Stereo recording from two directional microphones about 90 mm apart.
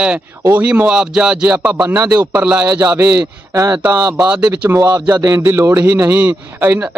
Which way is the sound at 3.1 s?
35° right (ahead or behind).